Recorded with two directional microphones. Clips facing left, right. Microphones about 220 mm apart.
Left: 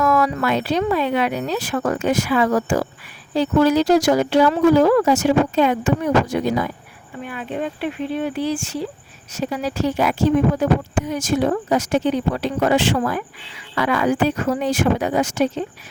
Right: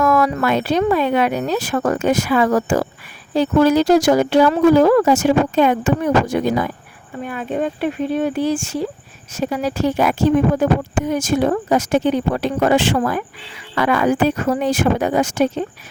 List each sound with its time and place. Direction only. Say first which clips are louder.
0.0 s speech: right 2 dB; 50° right (ahead or behind)